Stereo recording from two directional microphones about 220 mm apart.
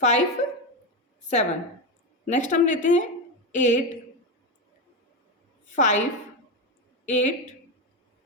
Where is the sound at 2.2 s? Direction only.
35° left (ahead or behind).